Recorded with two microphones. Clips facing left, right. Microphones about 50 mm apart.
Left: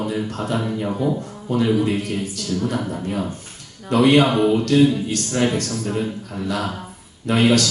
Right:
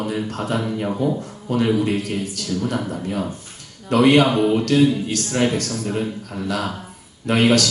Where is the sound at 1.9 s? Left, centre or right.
Left.